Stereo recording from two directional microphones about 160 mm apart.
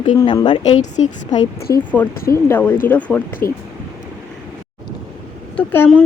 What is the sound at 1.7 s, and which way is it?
A woman's voice, 20° left (ahead or behind).